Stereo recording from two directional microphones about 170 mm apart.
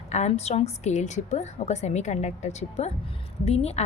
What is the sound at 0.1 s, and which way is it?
A woman's voice, 40° left (ahead or behind).